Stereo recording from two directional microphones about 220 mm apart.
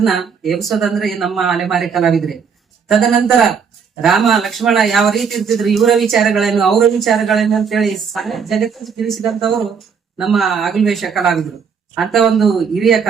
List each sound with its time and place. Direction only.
0.0 s speech: centre (ahead or behind)